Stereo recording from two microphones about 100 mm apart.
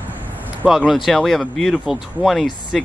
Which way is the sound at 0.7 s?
5° right (ahead or behind).